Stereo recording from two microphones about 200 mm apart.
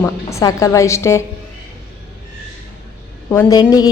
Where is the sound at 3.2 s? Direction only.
10° left (ahead or behind).